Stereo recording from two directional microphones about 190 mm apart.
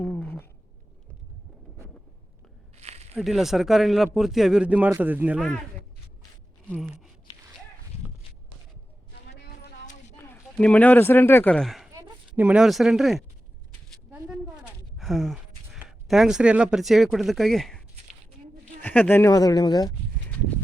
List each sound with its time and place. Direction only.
0.0 s cat: 10° left (ahead or behind)
2.7 s a sound: 35° right (ahead or behind)
3.2 s speech: centre (ahead or behind)
6.7 s speech: centre (ahead or behind)
10.2 s speech: 5° left (ahead or behind)
11.9 s a sound: 15° right (ahead or behind)
12.5 s speech: centre (ahead or behind)
14.1 s a sound: centre (ahead or behind)
18.8 s speech: 10° left (ahead or behind)